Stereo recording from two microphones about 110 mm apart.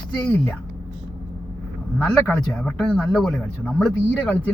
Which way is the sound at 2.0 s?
15° left (ahead or behind).